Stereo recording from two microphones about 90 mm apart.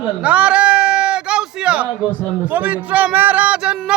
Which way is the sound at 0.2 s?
15° right (ahead or behind).